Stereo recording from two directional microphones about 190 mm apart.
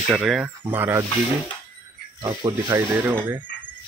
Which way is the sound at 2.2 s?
25° right (ahead or behind).